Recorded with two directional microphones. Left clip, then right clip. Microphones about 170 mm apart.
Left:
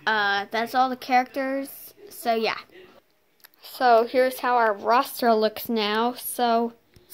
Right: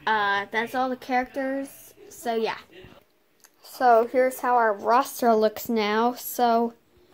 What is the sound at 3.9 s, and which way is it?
A woman's voice, 15° left (ahead or behind).